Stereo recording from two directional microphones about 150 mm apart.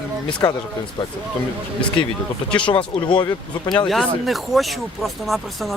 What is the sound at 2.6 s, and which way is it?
Speech, 35° left (ahead or behind).